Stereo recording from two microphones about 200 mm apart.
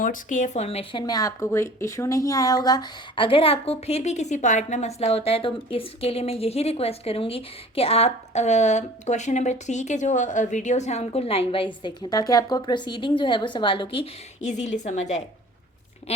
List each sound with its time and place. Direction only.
0.0 s a woman's voice: 40° left (ahead or behind)